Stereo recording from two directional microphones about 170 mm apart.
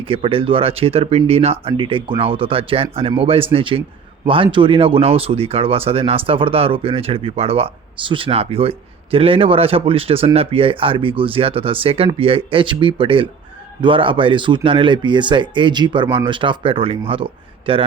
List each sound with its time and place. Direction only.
0.0 s speech: 30° right (ahead or behind)